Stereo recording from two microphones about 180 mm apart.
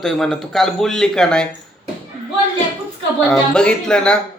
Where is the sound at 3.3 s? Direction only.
5° left (ahead or behind).